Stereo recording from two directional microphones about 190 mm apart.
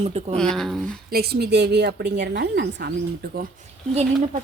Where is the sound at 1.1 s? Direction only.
55° right (ahead or behind).